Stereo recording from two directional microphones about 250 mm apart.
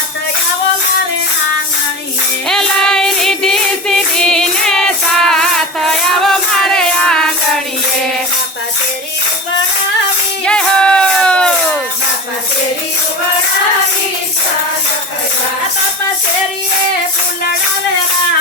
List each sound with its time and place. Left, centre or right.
2.5 s music: centre
10.4 s music: centre